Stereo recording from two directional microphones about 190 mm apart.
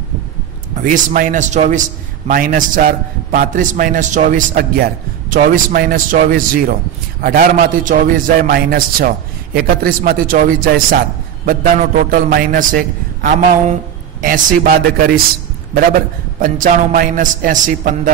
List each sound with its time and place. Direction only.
0.7 s a man's voice: 45° right (ahead or behind)
16.3 s a man's voice: 45° right (ahead or behind)